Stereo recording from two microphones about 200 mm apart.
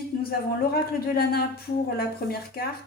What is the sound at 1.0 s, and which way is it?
Speech, 50° left (ahead or behind).